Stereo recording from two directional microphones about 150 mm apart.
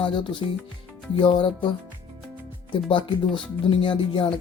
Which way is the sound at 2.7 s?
35° left (ahead or behind).